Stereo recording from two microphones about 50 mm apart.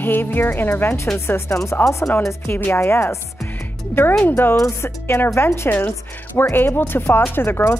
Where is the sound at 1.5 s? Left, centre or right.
Left.